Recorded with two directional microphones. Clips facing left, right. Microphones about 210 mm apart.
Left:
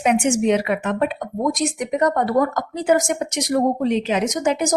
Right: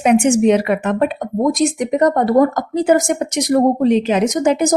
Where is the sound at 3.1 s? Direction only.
50° right (ahead or behind); by 4.7 s 35° right (ahead or behind).